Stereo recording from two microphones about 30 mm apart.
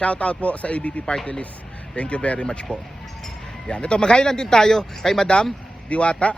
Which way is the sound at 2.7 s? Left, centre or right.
Left.